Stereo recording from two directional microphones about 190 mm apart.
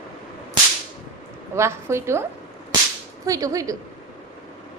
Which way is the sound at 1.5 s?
15° right (ahead or behind).